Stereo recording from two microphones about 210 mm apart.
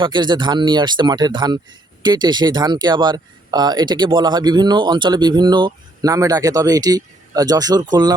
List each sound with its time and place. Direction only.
0.0 s speech: 20° right (ahead or behind)